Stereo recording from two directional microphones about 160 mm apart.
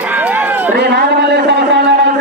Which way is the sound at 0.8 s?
90° right.